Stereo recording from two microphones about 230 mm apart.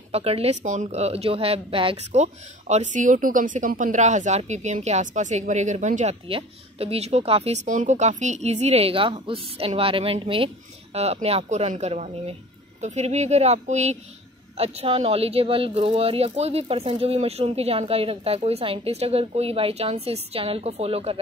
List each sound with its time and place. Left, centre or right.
0.1 s a woman's voice: right